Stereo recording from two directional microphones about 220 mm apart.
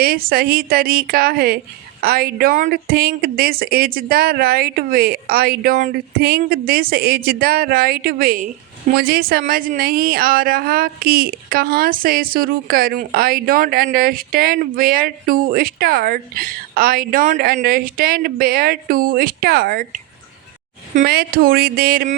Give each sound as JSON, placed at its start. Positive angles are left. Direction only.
{"t": 0.0, "sound": "speech", "side_deg": -45}
{"t": 21.0, "sound": "speech", "side_deg": -45}